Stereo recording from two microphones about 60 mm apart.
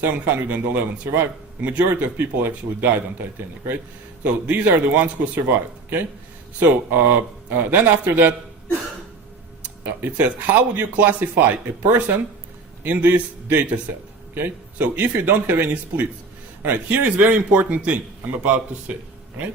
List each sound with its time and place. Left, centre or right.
0.0 s a man's voice: right
9.8 s speech: right
14.8 s a man's voice: right